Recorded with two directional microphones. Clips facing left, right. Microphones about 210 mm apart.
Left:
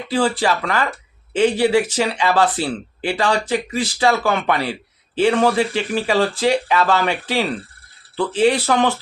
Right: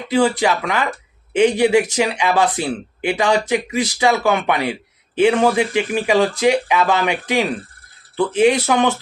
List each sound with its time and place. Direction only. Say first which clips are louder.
0.1 s speech: right 2 dB; 10° right (ahead or behind)